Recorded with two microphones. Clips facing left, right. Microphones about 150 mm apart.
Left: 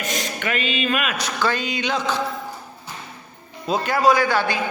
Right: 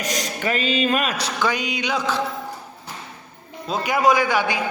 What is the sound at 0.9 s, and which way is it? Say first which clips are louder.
Speech: right 2 dB; 35° right (ahead or behind).